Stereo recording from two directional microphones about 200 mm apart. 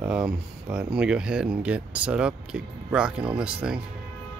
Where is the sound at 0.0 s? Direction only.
5° right (ahead or behind).